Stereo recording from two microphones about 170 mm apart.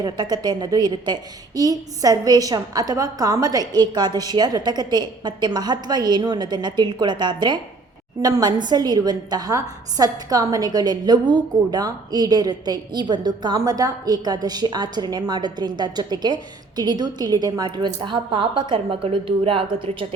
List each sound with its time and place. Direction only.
0.0 s a woman's voice: 25° right (ahead or behind)